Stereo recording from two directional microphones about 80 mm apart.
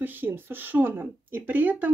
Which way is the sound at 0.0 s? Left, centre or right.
Right.